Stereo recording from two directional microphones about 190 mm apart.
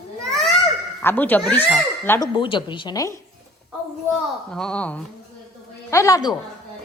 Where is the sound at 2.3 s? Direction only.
25° left (ahead or behind).